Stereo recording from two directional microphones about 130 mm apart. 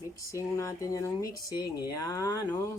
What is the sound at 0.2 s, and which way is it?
Speech, 25° left (ahead or behind).